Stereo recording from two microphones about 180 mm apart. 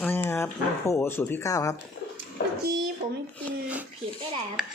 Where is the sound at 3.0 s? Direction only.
40° right (ahead or behind).